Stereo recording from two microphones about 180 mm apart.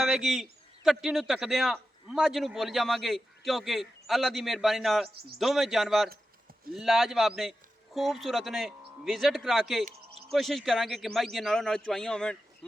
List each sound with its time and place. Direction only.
0.0 s a man's voice: centre (ahead or behind)